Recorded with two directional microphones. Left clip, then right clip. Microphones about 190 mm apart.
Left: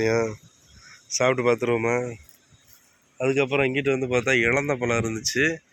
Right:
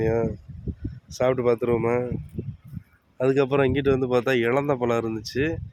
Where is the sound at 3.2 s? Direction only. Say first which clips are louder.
Right 1 dB; 30° right (ahead or behind).